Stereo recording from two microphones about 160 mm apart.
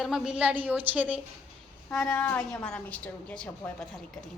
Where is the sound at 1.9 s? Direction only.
5° left (ahead or behind).